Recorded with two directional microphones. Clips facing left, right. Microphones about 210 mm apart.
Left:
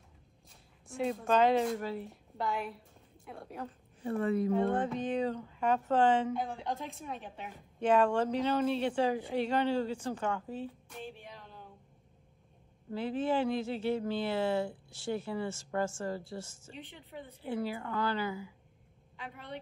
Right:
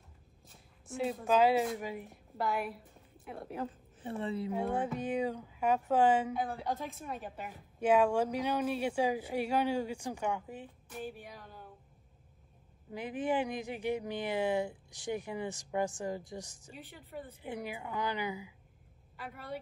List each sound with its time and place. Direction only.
0.8 s a woman's voice: centre (ahead or behind)
2.4 s a woman's voice: centre (ahead or behind)
10.9 s music: centre (ahead or behind)
11.3 s a sound: 5° right (ahead or behind)
12.9 s speech: 15° right (ahead or behind)
16.7 s a woman's voice: centre (ahead or behind)
17.4 s speech: 15° right (ahead or behind)
19.1 s a woman's voice: 5° right (ahead or behind)